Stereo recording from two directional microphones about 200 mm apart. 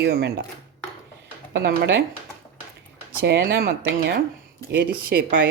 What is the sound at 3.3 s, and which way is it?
Speech, 50° right (ahead or behind).